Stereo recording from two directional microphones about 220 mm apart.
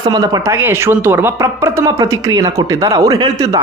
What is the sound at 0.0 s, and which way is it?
A man's voice, 20° right (ahead or behind).